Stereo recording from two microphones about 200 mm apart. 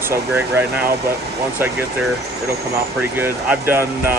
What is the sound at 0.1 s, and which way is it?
Speech, 10° right (ahead or behind).